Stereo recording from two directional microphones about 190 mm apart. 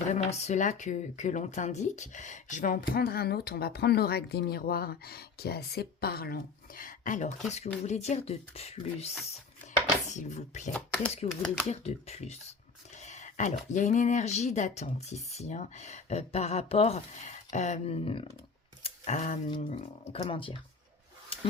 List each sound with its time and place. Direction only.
0.1 s speech: 35° left (ahead or behind)
10.8 s speech: 5° left (ahead or behind)
11.7 s speech: 35° left (ahead or behind)
13.0 s a sound: 40° left (ahead or behind)
13.7 s speech: 40° left (ahead or behind)
18.8 s typing: 35° left (ahead or behind)
20.1 s speech: 30° left (ahead or behind)